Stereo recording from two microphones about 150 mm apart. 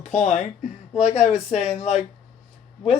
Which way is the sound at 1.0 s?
45° left (ahead or behind).